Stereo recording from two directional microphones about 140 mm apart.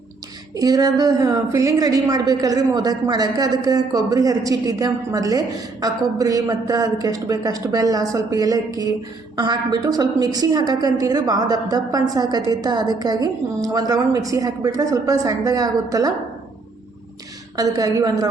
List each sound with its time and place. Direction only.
0.5 s a woman's voice: 25° right (ahead or behind)
17.6 s a woman's voice: 25° right (ahead or behind)